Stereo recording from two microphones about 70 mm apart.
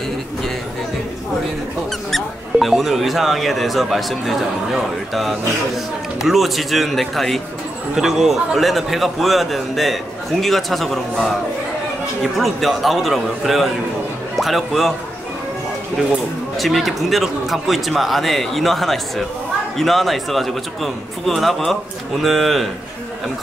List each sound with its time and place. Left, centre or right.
2.0 s speech: centre
12.2 s speech: centre
16.5 s speech: centre